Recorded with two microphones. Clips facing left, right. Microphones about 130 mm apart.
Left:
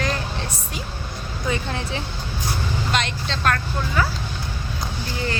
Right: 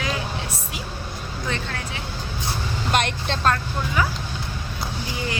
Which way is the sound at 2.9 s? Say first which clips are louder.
Right 5 dB; 55° right (ahead or behind).